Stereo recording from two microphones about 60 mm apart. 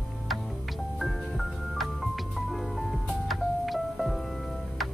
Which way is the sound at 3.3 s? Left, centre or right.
Centre.